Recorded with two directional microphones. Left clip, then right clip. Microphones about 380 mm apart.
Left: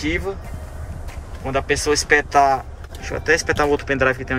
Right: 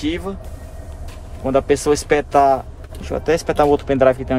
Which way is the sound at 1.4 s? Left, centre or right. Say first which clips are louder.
Right 4 dB; centre.